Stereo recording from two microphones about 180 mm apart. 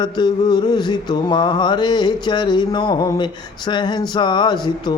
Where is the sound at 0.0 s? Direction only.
25° left (ahead or behind).